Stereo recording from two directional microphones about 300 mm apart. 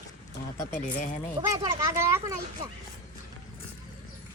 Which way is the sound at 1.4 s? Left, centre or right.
Centre.